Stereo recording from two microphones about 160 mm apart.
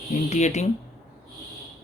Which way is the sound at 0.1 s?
45° left (ahead or behind).